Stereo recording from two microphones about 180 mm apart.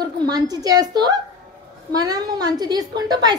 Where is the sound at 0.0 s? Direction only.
20° right (ahead or behind).